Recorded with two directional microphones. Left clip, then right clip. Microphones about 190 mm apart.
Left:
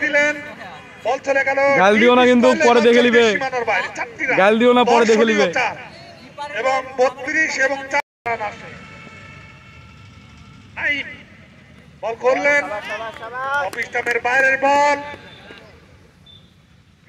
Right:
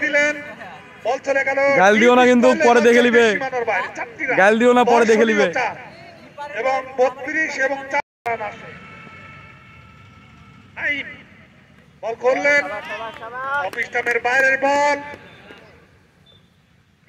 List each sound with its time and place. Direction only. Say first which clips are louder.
0.0 s a sound: left 1 dB; 55° right (ahead or behind)
1.0 s a man's voice: left 1 dB; 55° right (ahead or behind)
1.8 s speech: right 1 dB; 10° right (ahead or behind)
2.4 s speech: even; 55° right (ahead or behind)
2.7 s a man's voice: even; 5° right (ahead or behind)
3.3 s speech: left 1 dB; 50° right (ahead or behind)
4.4 s a man's voice: even; centre (ahead or behind)
4.8 s speech: even; 50° right (ahead or behind)
5.3 s a sound: left 1 dB; 50° right (ahead or behind); by 6.5 s 35° right (ahead or behind)
6.5 s a man's voice: left 1 dB; 50° right (ahead or behind)
10.7 s a sound: left 2 dB; 55° right (ahead or behind)
12.0 s speech: left 1 dB; 55° right (ahead or behind)
12.7 s speech: left 2 dB; 50° left (ahead or behind)
13.7 s speech: even; 50° right (ahead or behind)